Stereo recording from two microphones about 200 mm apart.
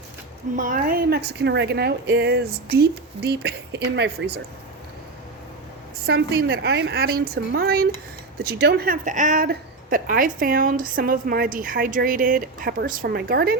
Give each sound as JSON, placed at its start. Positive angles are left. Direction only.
{"t": 0.5, "sound": "speech", "side_deg": -45}
{"t": 6.1, "sound": "a woman's voice", "side_deg": -55}